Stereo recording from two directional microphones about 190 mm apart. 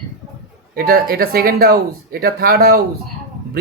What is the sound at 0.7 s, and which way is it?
Speech, 50° right (ahead or behind).